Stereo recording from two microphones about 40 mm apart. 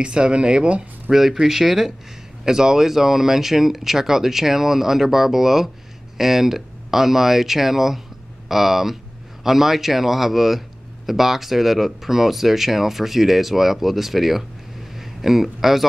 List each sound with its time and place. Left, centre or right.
0.0 s speech: right
1.1 s a man's voice: centre